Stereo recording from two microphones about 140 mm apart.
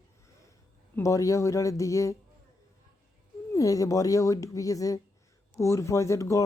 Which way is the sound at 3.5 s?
25° left (ahead or behind).